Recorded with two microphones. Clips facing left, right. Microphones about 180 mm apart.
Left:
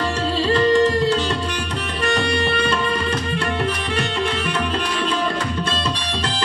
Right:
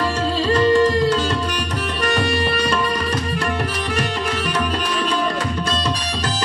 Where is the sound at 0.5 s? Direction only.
25° left (ahead or behind).